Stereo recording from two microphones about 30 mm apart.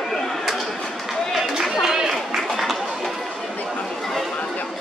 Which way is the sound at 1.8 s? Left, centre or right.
Centre.